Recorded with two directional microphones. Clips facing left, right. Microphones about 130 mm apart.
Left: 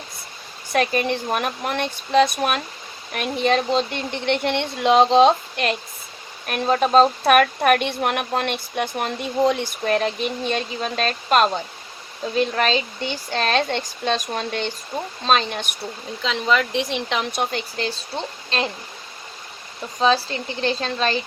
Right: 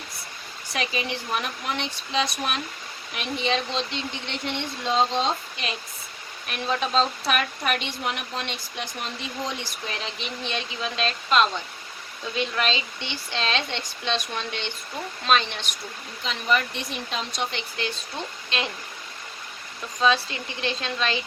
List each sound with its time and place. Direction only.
0.7 s speech: 55° left (ahead or behind)
6.5 s a woman's voice: 45° left (ahead or behind)
16.3 s speech: 90° left; by 17.4 s 75° left (ahead or behind)
17.4 s a woman's voice: 40° left (ahead or behind)
20.0 s a woman's voice: 35° left (ahead or behind)